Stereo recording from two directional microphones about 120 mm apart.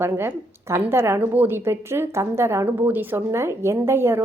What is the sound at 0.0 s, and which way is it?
A woman's voice, 20° right (ahead or behind).